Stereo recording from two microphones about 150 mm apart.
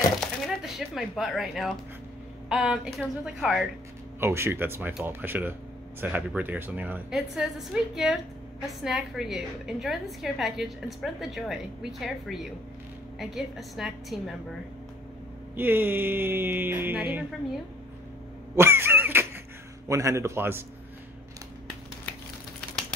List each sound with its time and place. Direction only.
0.2 s a sound: centre (ahead or behind)
2.5 s a woman's voice: 5° right (ahead or behind)
4.2 s a woman's voice: 15° right (ahead or behind); by 14.3 s centre (ahead or behind)
15.5 s speech: 15° right (ahead or behind)
18.6 s a sound: 15° right (ahead or behind)
19.9 s a man's voice: 20° right (ahead or behind)